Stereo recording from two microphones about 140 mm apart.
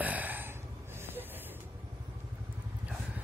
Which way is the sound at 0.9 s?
15° right (ahead or behind).